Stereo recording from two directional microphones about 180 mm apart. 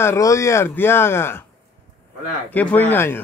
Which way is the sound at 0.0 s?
15° left (ahead or behind).